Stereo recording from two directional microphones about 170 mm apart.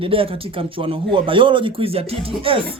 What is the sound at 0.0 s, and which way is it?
Speech, 35° right (ahead or behind).